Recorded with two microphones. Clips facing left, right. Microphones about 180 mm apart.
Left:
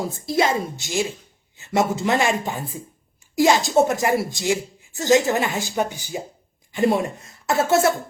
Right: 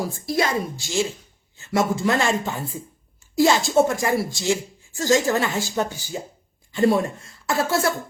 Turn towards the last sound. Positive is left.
turn(degrees=20)  # may be behind; listen again after turning